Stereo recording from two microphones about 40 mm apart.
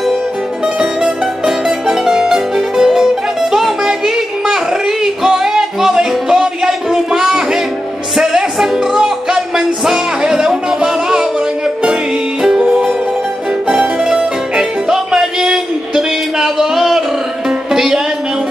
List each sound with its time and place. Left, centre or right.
0.7 s music: centre
3.5 s child singing: centre
8.2 s music: centre
13.7 s music: centre